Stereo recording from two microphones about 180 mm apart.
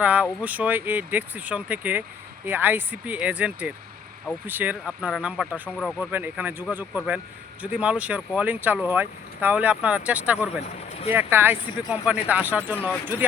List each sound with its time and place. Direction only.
0.0 s speech: 10° right (ahead or behind)
6.0 s speech: 10° right (ahead or behind)
10.6 s speech: 35° left (ahead or behind)
11.1 s speech: 10° right (ahead or behind)